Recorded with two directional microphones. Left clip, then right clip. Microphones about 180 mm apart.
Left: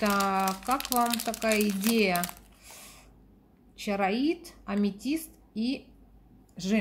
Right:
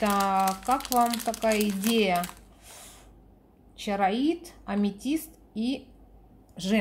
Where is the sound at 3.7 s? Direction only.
Centre (ahead or behind).